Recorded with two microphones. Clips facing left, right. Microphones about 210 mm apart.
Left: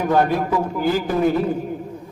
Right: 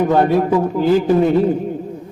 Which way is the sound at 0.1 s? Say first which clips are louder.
Right 4 dB; 25° right (ahead or behind).